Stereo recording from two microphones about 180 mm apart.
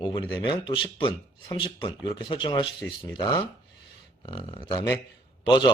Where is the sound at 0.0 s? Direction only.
25° left (ahead or behind).